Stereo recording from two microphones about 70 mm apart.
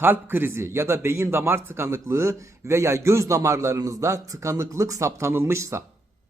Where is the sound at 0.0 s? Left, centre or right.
Right.